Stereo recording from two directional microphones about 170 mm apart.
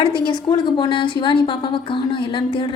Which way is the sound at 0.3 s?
25° left (ahead or behind).